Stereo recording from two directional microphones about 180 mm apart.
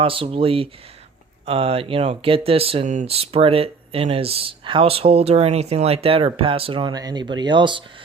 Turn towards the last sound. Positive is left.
turn(degrees=-25)  # may be behind; listen again after turning